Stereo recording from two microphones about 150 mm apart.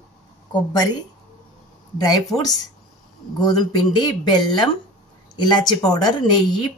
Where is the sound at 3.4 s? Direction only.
25° left (ahead or behind).